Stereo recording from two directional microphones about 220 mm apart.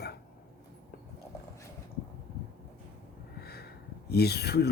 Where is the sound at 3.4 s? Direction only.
45° left (ahead or behind).